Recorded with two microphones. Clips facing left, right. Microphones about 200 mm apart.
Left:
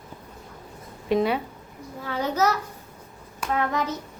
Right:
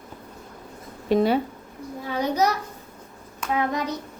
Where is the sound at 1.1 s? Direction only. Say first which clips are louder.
Right 3 dB; 35° right (ahead or behind).